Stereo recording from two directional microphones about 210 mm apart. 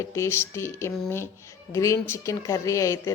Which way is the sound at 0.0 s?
15° left (ahead or behind).